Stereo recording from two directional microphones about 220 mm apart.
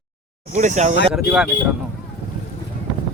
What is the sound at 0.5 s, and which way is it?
Speech, 35° right (ahead or behind).